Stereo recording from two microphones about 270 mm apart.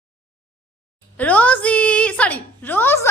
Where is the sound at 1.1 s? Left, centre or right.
Centre.